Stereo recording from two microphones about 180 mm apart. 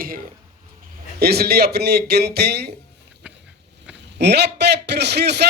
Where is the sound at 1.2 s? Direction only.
60° right (ahead or behind).